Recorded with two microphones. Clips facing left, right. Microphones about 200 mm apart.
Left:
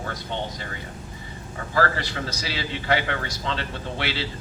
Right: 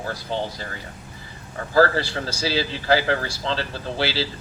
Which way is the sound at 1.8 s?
30° right (ahead or behind).